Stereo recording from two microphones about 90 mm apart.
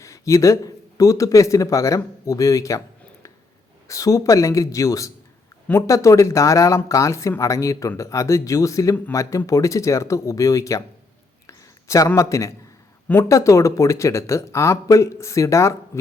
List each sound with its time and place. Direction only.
0.0 s speech: 35° left (ahead or behind)
3.8 s speech: 40° left (ahead or behind)
11.4 s a sound: 35° left (ahead or behind)
13.2 s speech: 35° left (ahead or behind)